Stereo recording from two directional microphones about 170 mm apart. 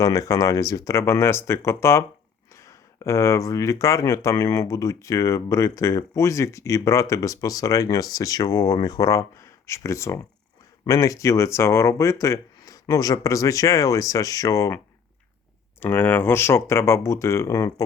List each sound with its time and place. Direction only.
0.0 s speech: 20° left (ahead or behind)
15.8 s speech: 10° left (ahead or behind)